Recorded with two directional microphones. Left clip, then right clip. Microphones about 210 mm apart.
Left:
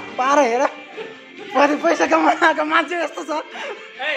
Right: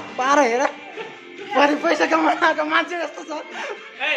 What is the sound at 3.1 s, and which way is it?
Speech, 30° left (ahead or behind).